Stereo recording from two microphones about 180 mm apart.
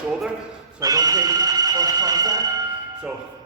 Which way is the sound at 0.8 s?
20° right (ahead or behind).